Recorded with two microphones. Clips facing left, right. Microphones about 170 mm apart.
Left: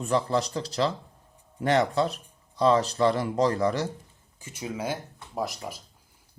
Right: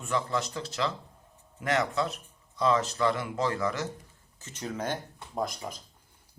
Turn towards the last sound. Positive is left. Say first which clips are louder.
# left 1 dB
turn(degrees=5)  # may be behind; listen again after turning